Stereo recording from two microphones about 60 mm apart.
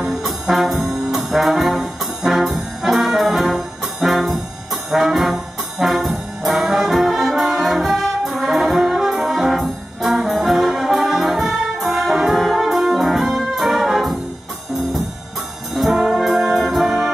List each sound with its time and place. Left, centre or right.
0.0 s trombone: centre
10.1 s brass instrument: centre
15.7 s brass instrument: centre